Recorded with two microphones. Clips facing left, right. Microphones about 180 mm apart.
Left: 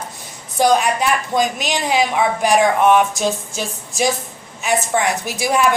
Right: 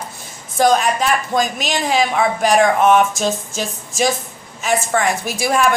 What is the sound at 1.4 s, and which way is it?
A woman's voice, 15° left (ahead or behind).